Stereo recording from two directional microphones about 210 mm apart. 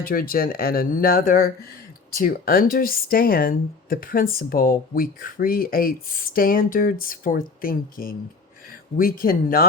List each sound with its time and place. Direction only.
0.0 s speech: 45° left (ahead or behind)